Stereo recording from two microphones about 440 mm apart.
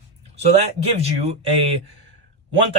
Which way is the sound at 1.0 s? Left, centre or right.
Right.